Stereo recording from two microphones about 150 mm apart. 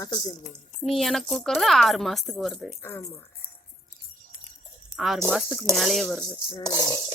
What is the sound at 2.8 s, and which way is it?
Speech, 15° left (ahead or behind).